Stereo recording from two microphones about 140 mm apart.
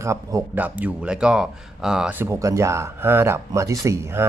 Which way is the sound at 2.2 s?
20° right (ahead or behind).